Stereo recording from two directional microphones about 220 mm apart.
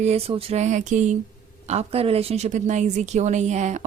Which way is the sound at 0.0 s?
30° right (ahead or behind).